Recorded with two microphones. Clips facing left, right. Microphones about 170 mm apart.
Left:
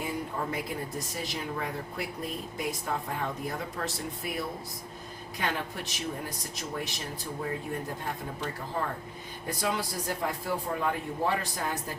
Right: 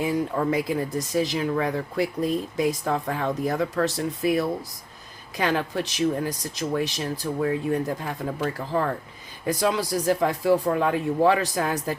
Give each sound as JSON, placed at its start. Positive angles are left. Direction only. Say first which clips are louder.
{"t": 0.0, "sound": "speech", "louder": "right 9 dB", "side_deg": -90}